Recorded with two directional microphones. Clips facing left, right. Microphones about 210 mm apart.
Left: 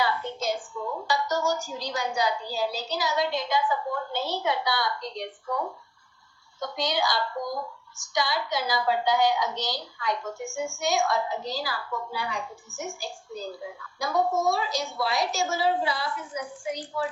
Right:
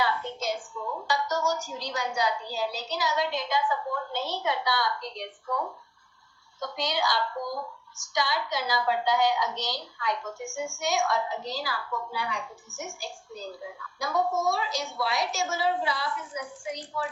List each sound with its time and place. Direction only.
0.0 s a woman's voice: 35° left (ahead or behind)